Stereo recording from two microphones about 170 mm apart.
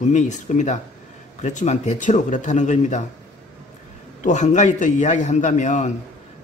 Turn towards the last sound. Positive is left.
turn(degrees=45)  # may be behind; listen again after turning